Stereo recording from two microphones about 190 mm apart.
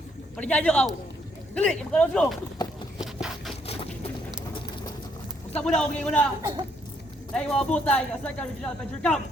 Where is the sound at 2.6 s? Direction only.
20° left (ahead or behind).